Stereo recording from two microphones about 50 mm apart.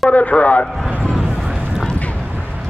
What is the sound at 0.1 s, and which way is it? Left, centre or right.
Speech, left.